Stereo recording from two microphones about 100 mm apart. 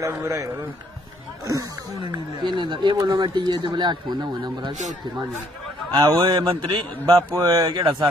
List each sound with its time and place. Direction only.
0.0 s a man's voice: 30° right (ahead or behind)
1.5 s speech: 40° right (ahead or behind)
5.9 s speech: 45° right (ahead or behind)
7.2 s speech: 40° right (ahead or behind)